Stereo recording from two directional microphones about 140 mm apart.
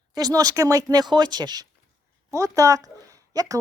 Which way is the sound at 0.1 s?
25° right (ahead or behind).